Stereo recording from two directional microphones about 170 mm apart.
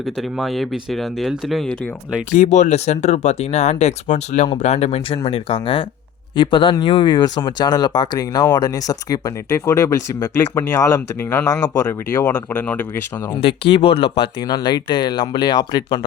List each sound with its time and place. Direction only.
0.0 s speech: centre (ahead or behind)
2.3 s speech: 45° left (ahead or behind); by 13.0 s 10° left (ahead or behind)
13.7 s speech: 35° left (ahead or behind)